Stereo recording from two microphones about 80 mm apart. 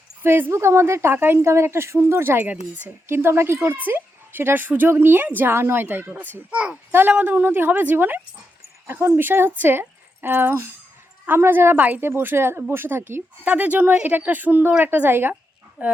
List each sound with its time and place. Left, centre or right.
0.2 s speech: right